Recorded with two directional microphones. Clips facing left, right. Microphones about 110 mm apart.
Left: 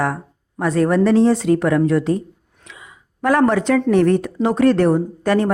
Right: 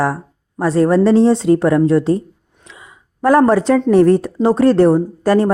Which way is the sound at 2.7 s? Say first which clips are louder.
Right 1 dB; 30° right (ahead or behind).